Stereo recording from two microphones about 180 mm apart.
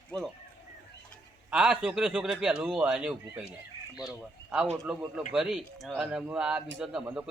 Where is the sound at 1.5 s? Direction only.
5° right (ahead or behind).